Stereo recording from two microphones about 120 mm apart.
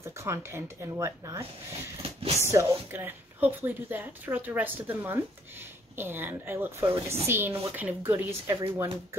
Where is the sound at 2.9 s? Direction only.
15° right (ahead or behind).